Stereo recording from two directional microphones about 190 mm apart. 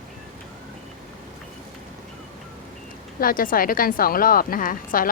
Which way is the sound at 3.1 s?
50° left (ahead or behind).